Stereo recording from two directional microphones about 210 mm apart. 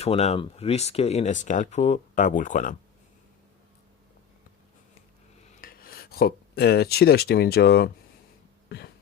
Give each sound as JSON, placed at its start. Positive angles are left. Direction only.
{"t": 0.0, "sound": "speech", "side_deg": 30}
{"t": 5.5, "sound": "speech", "side_deg": 45}